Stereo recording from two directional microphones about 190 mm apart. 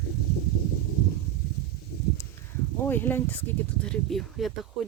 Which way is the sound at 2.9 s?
10° left (ahead or behind).